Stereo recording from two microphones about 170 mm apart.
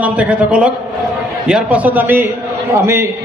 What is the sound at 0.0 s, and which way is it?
A man's voice, 10° right (ahead or behind).